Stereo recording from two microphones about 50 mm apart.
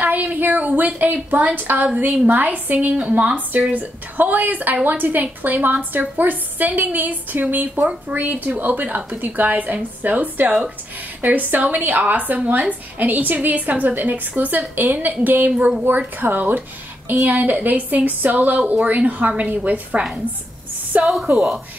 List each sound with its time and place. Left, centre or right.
0.0 s a woman's voice: right